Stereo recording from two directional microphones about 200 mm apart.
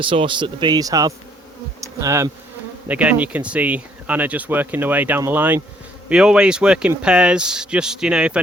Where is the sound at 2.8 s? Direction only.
5° right (ahead or behind).